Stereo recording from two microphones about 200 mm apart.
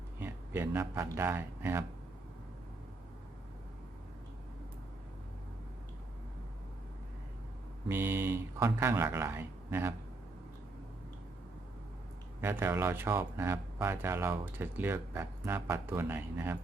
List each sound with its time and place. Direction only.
0.2 s speech: 10° right (ahead or behind)
7.9 s speech: 15° right (ahead or behind)
12.4 s speech: 10° right (ahead or behind)